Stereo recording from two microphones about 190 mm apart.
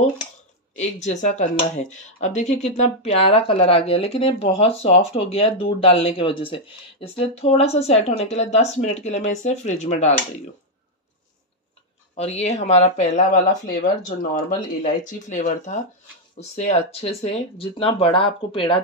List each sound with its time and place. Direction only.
0.7 s speech: 40° left (ahead or behind)
12.2 s speech: 35° left (ahead or behind)